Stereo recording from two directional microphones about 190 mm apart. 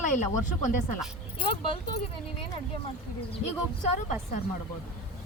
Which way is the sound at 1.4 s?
30° left (ahead or behind).